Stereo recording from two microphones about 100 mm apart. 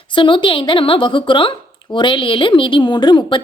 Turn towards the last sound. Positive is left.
turn(degrees=50)  # may be behind; listen again after turning